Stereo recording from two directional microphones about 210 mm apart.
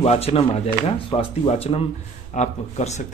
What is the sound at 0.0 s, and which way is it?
A man's voice, 30° left (ahead or behind).